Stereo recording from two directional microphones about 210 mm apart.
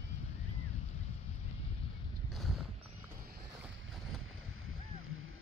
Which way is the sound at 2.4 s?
Centre (ahead or behind).